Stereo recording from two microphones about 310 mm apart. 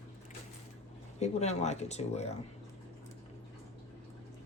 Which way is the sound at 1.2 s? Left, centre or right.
Left.